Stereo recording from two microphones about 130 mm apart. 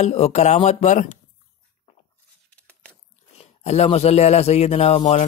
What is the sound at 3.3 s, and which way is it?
Speech, 55° left (ahead or behind).